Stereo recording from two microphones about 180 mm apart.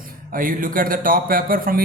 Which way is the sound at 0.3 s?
50° right (ahead or behind).